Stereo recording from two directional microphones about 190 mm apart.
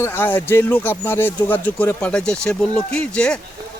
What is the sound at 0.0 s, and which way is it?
Speech, 10° left (ahead or behind).